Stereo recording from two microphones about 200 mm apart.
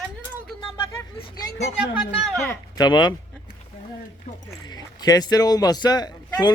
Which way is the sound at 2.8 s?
20° left (ahead or behind).